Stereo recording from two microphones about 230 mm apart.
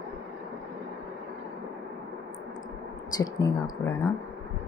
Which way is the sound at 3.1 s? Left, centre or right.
Centre.